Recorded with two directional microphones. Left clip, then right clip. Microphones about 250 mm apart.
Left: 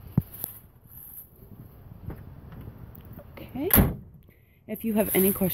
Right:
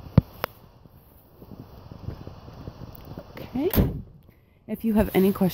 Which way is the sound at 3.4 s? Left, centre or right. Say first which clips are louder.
Right 3 dB; right.